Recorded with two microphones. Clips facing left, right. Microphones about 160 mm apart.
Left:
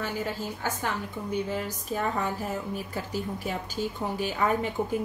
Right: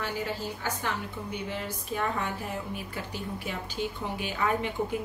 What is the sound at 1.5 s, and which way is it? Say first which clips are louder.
A woman's voice: left 3 dB; 40° left (ahead or behind).